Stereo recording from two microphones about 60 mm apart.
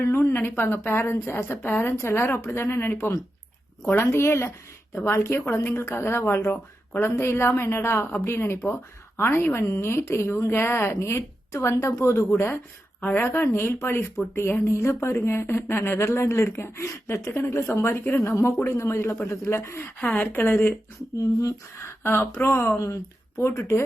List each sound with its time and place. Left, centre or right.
0.0 s a woman's voice: left
13.0 s a woman's voice: left
20.1 s a woman's voice: left
21.4 s speech: left